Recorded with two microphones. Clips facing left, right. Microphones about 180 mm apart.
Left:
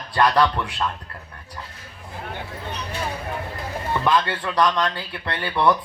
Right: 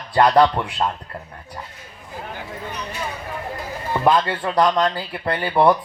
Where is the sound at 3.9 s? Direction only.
30° right (ahead or behind).